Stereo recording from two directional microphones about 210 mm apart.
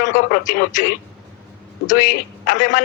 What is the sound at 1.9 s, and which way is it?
Speech, 40° left (ahead or behind).